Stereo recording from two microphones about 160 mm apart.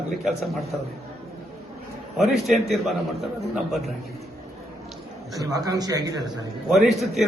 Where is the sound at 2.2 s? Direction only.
Centre (ahead or behind).